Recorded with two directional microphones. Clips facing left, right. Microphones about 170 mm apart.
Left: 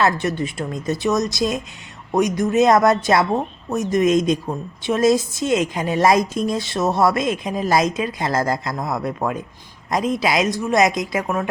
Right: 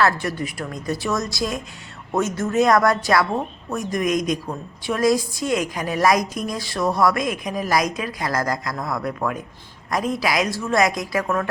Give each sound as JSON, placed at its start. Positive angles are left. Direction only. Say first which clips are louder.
{"t": 0.0, "sound": "speech", "louder": "left 2 dB", "side_deg": 20}